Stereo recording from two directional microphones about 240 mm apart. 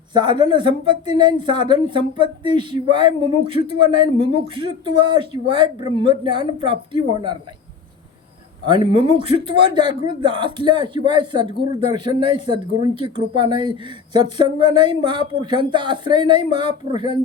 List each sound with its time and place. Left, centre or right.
0.1 s speech: centre
8.6 s speech: centre